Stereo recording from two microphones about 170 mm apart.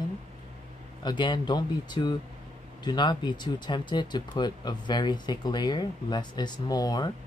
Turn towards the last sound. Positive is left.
turn(degrees=25)  # may be behind; listen again after turning